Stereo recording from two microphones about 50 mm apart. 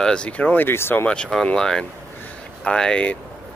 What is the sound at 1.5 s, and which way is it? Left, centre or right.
Speech, centre.